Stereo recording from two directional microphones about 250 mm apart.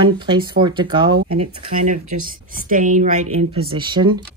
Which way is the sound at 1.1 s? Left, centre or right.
Right.